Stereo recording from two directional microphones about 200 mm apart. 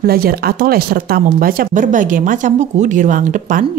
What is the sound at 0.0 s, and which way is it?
Speech, 50° right (ahead or behind).